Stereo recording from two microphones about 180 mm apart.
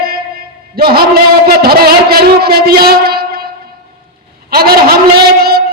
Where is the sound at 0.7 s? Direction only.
60° right (ahead or behind).